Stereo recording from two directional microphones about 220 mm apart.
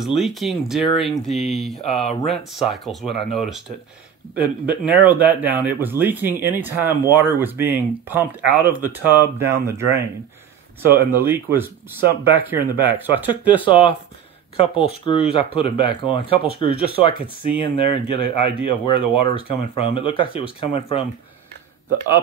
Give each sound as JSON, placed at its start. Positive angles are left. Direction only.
{"t": 0.0, "sound": "speech", "side_deg": 0}
{"t": 13.5, "sound": "speech", "side_deg": 25}